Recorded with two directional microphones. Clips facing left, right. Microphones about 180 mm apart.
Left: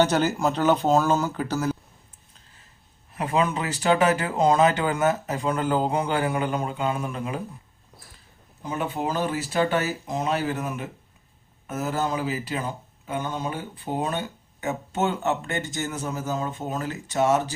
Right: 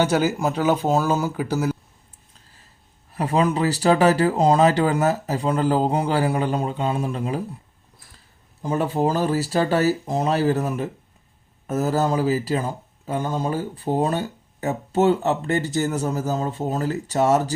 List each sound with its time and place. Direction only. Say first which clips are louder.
0.0 s speech: right 1 dB; 10° right (ahead or behind)
3.1 s speech: right 3 dB; 35° right (ahead or behind)
8.6 s speech: right 6 dB; 40° right (ahead or behind)